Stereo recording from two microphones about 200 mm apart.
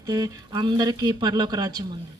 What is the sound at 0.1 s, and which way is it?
Speech, 20° right (ahead or behind).